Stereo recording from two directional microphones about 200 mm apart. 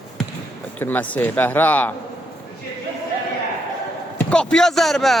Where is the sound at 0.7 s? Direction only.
10° left (ahead or behind).